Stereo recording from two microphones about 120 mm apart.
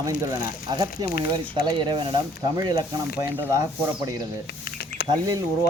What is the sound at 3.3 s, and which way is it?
Speech, 20° right (ahead or behind).